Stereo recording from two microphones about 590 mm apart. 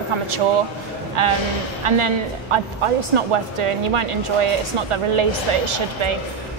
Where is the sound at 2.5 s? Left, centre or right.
Right.